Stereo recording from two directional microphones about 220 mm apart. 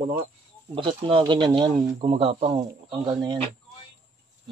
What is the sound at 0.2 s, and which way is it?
Speech, 25° right (ahead or behind).